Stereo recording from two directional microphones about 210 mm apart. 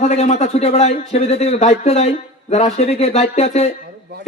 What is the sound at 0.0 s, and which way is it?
Speech, 30° left (ahead or behind).